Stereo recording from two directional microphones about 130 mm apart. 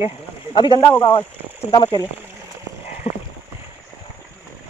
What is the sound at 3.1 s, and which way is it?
Rowboat, 55° left (ahead or behind).